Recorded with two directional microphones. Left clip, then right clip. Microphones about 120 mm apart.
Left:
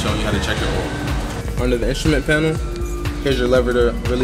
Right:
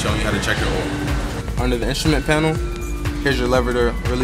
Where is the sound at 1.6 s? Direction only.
25° right (ahead or behind).